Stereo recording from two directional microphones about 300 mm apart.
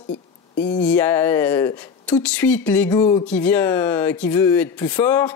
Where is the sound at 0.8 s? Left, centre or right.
Centre.